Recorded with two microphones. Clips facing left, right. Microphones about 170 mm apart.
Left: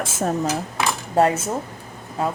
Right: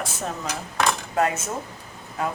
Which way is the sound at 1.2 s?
35° left (ahead or behind).